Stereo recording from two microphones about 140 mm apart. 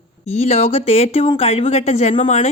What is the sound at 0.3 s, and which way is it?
A woman's voice, 50° left (ahead or behind).